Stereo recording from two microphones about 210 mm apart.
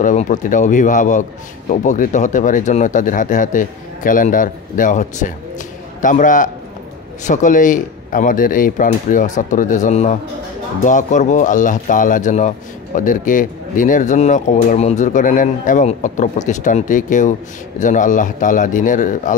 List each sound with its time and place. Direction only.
0.0 s speech: 35° left (ahead or behind)